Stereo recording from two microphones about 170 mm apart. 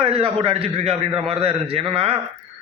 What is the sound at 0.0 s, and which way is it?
Speech, 35° right (ahead or behind).